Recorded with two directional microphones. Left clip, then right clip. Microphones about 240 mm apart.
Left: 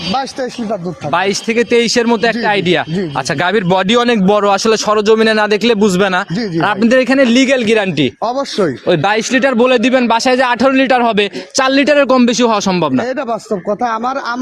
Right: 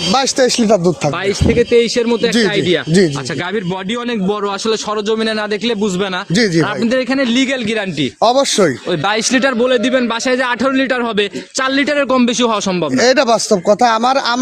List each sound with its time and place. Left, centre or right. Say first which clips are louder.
0.3 s speech: right 8 dB; right
1.1 s a man's voice: left 1 dB; left
8.2 s speech: right 5 dB; right
9.6 s a man's voice: left 3 dB; left
13.0 s speech: right 6 dB; right